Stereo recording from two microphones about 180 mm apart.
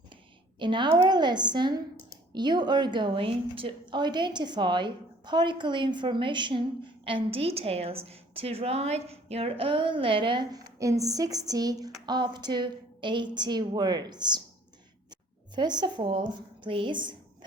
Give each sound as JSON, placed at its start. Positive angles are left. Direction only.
{"t": 0.6, "sound": "a woman's voice", "side_deg": -25}